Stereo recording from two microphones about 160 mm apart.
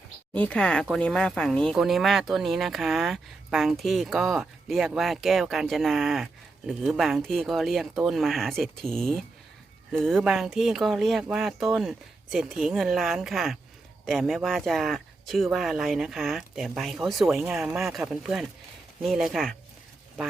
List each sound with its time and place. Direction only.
0.3 s speech: 5° left (ahead or behind)